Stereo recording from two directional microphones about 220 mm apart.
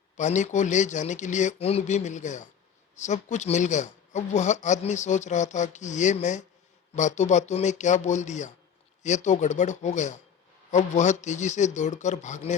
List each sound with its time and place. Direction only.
0.2 s speech: 35° left (ahead or behind)